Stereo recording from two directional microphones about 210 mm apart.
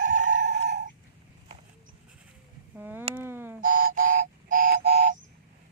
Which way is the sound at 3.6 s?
40° right (ahead or behind).